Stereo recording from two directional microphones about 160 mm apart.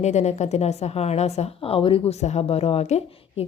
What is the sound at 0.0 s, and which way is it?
A woman's voice, 45° left (ahead or behind).